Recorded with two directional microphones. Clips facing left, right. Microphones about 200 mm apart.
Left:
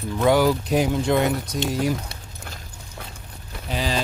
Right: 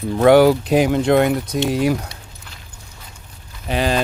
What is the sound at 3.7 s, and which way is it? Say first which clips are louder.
Speech: right 6 dB; 60° right (ahead or behind).